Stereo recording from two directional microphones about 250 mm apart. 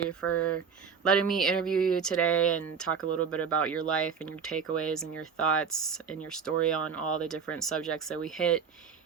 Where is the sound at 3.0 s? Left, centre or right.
Left.